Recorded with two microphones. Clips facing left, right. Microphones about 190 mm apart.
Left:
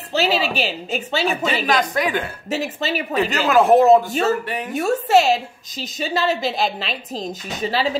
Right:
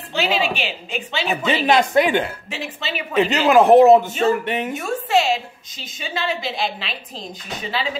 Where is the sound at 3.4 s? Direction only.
15° right (ahead or behind).